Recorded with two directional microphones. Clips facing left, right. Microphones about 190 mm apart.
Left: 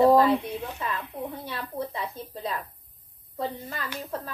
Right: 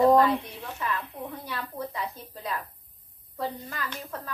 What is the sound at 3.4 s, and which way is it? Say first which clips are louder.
Speech: left 1 dB; 25° left (ahead or behind).